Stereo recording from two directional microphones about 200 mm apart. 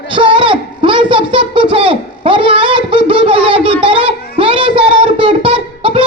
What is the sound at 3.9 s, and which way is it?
Child singing, 25° right (ahead or behind).